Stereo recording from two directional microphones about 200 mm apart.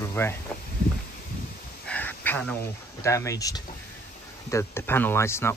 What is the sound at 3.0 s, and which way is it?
Speech, 15° left (ahead or behind).